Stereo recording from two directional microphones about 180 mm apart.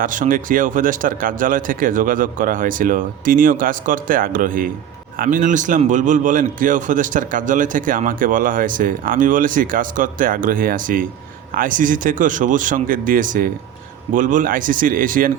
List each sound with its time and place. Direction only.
0.0 s a man's voice: 50° right (ahead or behind)